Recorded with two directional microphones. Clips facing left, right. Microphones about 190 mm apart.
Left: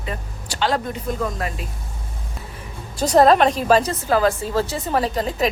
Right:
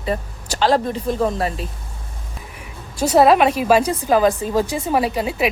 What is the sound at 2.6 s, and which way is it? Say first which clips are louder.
A woman's voice: right 2 dB; 10° right (ahead or behind).